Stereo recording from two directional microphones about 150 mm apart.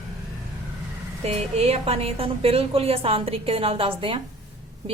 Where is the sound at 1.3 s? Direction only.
45° right (ahead or behind).